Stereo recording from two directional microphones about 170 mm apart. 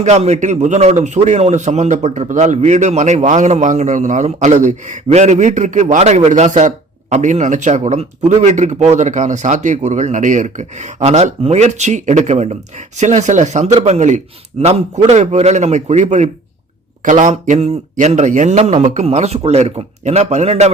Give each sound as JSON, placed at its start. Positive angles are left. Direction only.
{"t": 0.0, "sound": "a man's voice", "side_deg": -40}